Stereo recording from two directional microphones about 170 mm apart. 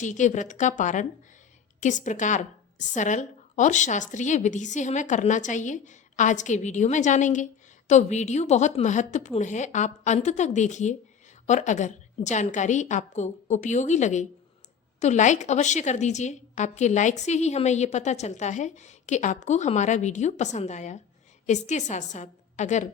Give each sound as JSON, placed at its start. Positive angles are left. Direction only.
{"t": 0.0, "sound": "a woman's voice", "side_deg": 45}